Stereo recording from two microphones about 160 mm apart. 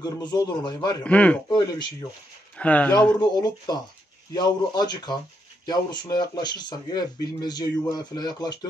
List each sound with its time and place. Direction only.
0.0 s speech: 25° left (ahead or behind)
1.0 s a man's voice: 10° left (ahead or behind)
1.5 s speech: 25° left (ahead or behind)
2.5 s speech: 10° left (ahead or behind)
3.2 s speech: 25° left (ahead or behind)